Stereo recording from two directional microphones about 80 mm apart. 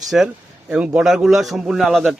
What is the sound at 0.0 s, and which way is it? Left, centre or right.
A man's voice, centre.